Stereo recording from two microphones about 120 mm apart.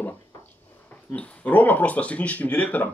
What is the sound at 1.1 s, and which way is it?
Speech, 10° left (ahead or behind).